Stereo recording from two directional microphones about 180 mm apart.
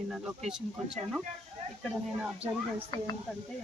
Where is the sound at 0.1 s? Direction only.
Centre (ahead or behind).